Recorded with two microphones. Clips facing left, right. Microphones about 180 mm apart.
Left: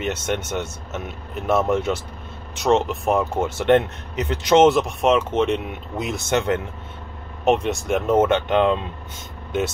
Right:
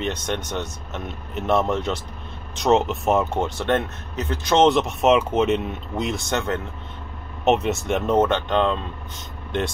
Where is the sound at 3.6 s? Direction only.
15° left (ahead or behind).